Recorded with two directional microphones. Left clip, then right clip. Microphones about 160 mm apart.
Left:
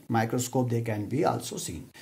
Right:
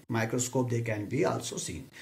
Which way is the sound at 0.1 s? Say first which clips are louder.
Left 3 dB; 50° left (ahead or behind).